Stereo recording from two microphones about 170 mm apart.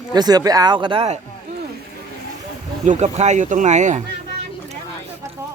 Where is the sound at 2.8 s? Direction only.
45° right (ahead or behind).